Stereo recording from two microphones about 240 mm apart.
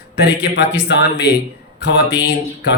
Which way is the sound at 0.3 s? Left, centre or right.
Left.